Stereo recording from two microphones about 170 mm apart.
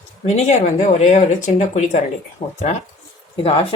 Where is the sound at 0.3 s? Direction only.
45° left (ahead or behind).